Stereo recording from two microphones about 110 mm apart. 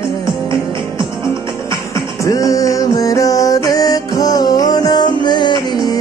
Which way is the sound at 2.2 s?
30° left (ahead or behind).